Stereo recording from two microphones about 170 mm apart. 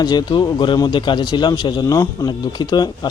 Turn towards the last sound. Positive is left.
turn(degrees=25)  # may be behind; listen again after turning